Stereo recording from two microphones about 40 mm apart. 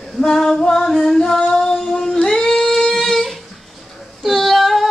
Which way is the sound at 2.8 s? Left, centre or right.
Centre.